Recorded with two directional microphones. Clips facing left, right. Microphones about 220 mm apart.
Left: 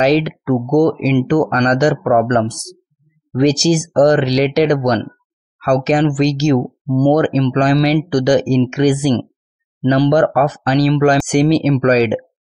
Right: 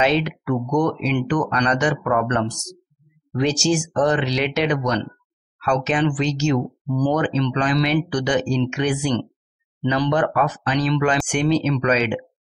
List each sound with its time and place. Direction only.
0.0 s speech: 40° left (ahead or behind)